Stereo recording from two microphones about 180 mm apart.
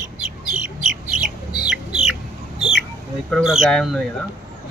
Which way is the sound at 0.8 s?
5° right (ahead or behind).